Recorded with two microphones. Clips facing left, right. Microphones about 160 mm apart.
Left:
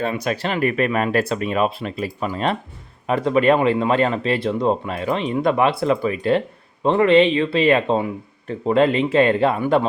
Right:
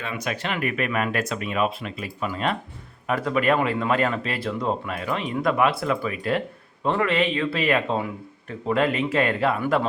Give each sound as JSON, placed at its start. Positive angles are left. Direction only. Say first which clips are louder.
{"t": 0.0, "sound": "speech", "louder": "left 7 dB", "side_deg": 35}
{"t": 3.1, "sound": "speech", "louder": "left 6 dB", "side_deg": 25}